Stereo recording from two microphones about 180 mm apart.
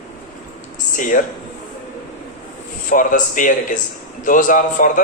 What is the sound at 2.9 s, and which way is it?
Speech, 45° left (ahead or behind).